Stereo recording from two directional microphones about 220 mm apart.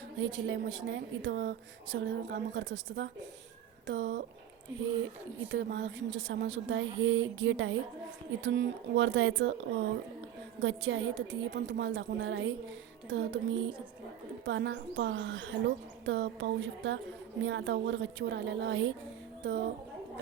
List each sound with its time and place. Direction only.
0.2 s speech: 60° right (ahead or behind)